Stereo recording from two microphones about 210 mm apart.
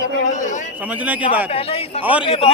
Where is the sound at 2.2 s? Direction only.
25° left (ahead or behind).